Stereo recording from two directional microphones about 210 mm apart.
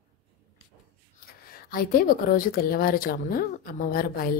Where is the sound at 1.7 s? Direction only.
45° left (ahead or behind).